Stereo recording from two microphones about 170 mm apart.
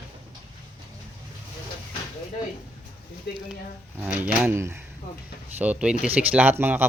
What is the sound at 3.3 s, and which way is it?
Speech, 75° left (ahead or behind).